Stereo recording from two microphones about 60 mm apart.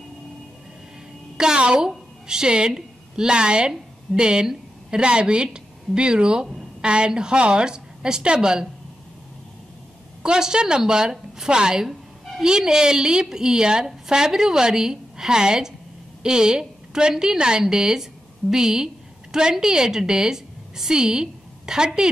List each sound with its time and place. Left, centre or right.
1.4 s a woman's voice: centre
10.2 s a woman's voice: centre